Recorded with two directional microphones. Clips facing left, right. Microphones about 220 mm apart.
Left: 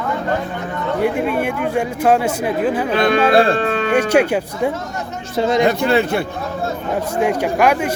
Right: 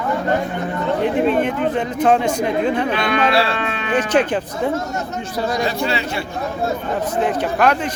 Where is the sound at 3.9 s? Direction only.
10° left (ahead or behind).